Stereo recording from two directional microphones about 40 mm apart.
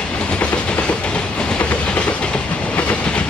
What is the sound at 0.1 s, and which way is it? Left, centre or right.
Train, left.